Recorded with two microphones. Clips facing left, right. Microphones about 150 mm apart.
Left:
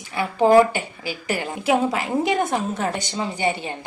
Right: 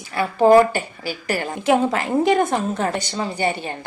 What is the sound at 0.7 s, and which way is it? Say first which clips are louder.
A woman's voice: right 2 dB; 15° left (ahead or behind).